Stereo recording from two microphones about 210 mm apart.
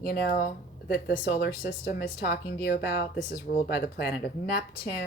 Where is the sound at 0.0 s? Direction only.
50° left (ahead or behind).